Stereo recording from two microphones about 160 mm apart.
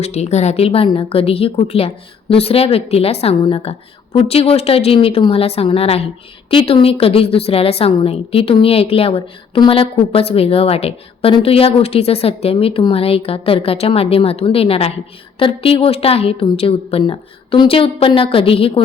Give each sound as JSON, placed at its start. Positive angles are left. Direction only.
{"t": 0.0, "sound": "a woman's voice", "side_deg": 45}